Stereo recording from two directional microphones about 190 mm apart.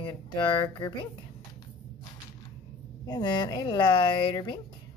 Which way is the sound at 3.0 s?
20° left (ahead or behind).